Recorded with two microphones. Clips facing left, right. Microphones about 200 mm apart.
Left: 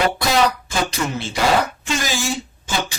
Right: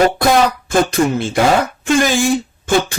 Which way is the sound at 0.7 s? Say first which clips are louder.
Right 9 dB; 50° right (ahead or behind).